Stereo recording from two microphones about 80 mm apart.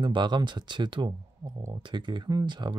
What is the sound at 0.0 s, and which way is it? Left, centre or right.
Speech, right.